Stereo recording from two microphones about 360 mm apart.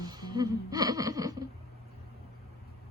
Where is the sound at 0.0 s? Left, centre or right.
Centre.